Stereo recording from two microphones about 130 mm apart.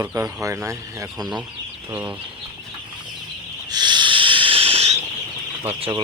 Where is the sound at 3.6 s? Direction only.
35° right (ahead or behind); by 5.0 s 55° right (ahead or behind).